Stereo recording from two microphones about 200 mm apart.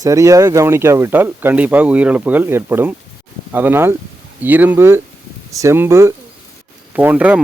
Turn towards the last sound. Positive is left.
turn(degrees=-10)  # may be behind; listen again after turning